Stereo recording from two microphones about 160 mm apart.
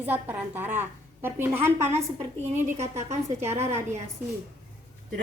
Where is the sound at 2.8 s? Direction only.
45° right (ahead or behind).